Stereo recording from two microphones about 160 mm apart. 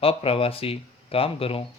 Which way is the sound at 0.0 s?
35° left (ahead or behind).